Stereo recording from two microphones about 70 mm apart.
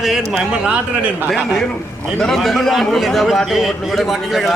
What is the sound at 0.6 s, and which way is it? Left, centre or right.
Speech, centre.